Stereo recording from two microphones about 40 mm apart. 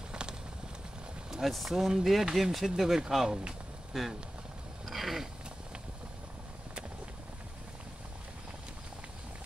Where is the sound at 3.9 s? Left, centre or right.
Centre.